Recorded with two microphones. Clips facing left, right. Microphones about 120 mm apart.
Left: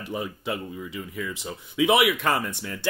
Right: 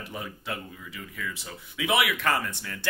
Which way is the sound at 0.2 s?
20° left (ahead or behind).